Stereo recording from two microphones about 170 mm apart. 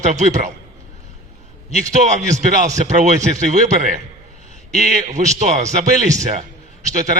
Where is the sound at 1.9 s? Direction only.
45° right (ahead or behind).